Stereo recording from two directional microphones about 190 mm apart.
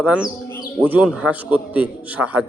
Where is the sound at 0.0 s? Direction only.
5° right (ahead or behind).